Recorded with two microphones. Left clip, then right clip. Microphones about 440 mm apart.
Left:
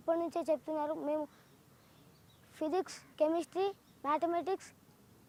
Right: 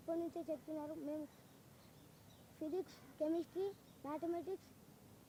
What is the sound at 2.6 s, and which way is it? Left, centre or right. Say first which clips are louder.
Speech: left 9 dB; left.